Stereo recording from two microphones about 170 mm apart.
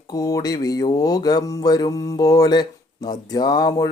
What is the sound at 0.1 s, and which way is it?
Speech, 20° left (ahead or behind).